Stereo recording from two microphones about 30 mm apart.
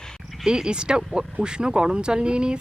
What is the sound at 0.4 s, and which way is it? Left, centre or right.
Speech, right.